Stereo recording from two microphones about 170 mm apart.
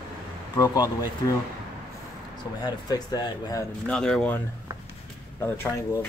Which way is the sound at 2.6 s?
25° left (ahead or behind).